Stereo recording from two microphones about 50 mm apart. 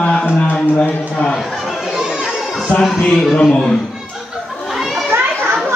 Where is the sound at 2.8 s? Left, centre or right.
Centre.